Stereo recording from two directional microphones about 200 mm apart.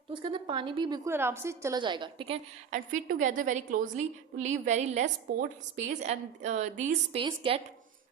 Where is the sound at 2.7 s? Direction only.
40° right (ahead or behind).